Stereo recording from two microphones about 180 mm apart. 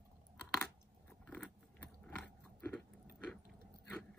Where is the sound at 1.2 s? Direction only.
5° left (ahead or behind).